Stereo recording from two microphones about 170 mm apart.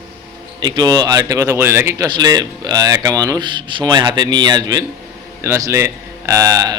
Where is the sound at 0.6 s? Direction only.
25° right (ahead or behind).